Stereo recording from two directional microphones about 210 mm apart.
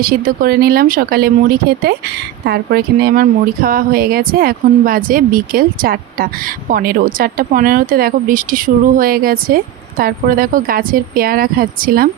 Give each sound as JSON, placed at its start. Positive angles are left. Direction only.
{"t": 0.0, "sound": "a woman's voice", "side_deg": -45}